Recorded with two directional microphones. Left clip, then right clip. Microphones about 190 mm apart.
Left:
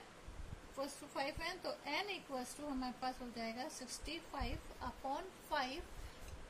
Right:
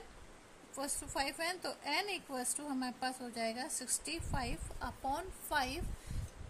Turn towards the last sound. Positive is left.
turn(degrees=-50)  # may be behind; listen again after turning